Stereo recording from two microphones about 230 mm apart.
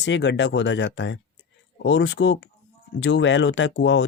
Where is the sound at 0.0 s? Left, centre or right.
Left.